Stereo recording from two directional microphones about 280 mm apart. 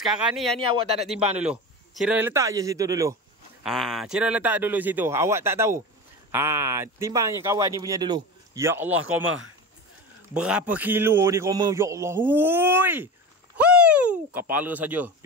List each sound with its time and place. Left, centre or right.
0.0 s a man's voice: centre
3.6 s a man's voice: centre
9.0 s speech: right
10.3 s a man's voice: centre